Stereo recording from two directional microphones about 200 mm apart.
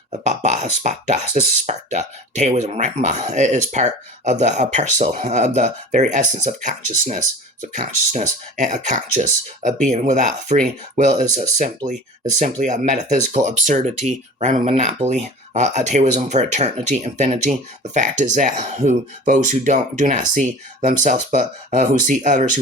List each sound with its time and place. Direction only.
0.8 s speech: 40° right (ahead or behind)